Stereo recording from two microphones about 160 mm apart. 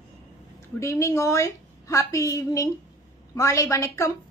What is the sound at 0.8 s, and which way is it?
A woman's voice, 20° left (ahead or behind).